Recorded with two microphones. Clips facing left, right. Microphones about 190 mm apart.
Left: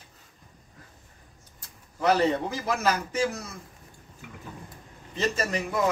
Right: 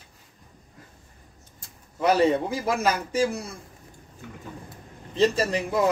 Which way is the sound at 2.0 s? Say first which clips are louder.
Right 3 dB; 10° right (ahead or behind).